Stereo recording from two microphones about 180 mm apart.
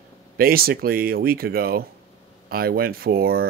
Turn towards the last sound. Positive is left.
turn(degrees=-60)  # may be behind; listen again after turning